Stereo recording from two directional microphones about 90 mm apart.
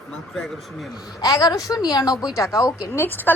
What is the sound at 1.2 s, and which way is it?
A woman's voice, 40° left (ahead or behind).